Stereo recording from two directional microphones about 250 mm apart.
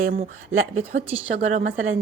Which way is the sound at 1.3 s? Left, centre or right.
Right.